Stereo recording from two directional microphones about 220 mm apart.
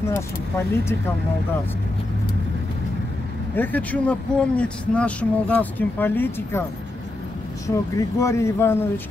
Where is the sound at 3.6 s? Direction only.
5° left (ahead or behind).